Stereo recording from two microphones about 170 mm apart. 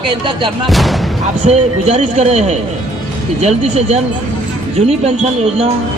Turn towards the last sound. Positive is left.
turn(degrees=-35)  # may be behind; listen again after turning